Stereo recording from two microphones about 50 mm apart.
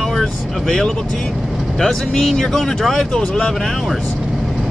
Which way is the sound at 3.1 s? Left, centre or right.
Centre.